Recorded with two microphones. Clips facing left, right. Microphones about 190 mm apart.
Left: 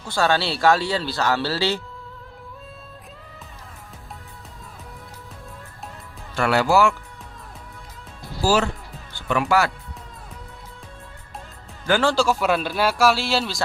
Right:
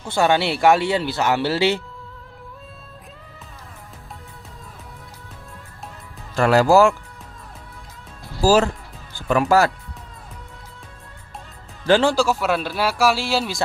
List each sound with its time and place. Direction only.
0.0 s speech: 20° right (ahead or behind)
6.3 s speech: 40° right (ahead or behind)
8.4 s speech: 40° right (ahead or behind)
11.9 s speech: 25° right (ahead or behind)
12.1 s speech: 5° right (ahead or behind)